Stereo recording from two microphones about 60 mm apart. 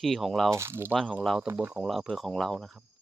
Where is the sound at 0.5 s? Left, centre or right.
Right.